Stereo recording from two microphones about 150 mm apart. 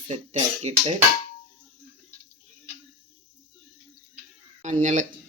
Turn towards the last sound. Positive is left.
turn(degrees=-55)  # may be behind; listen again after turning